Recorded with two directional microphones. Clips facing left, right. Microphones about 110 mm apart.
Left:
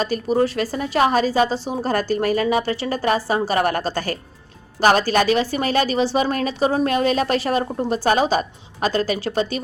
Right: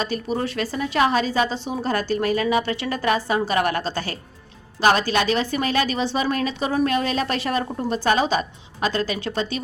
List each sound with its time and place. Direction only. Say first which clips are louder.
0.0 s a woman's voice: left 5 dB; 40° left (ahead or behind)